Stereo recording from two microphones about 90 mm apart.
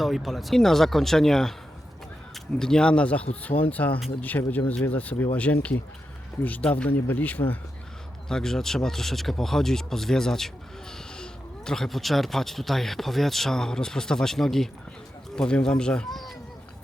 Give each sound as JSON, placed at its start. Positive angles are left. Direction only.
{"t": 0.0, "sound": "speech", "side_deg": 0}
{"t": 8.3, "sound": "speech", "side_deg": 5}